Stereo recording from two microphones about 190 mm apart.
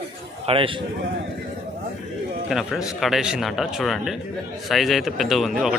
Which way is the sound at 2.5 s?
5° right (ahead or behind).